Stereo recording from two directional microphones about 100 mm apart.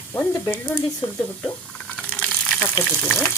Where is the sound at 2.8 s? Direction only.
10° left (ahead or behind).